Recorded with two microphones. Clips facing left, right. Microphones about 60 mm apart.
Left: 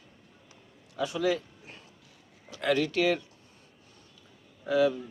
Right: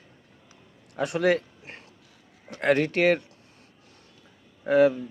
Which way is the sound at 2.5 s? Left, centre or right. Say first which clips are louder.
Right 4 dB; right.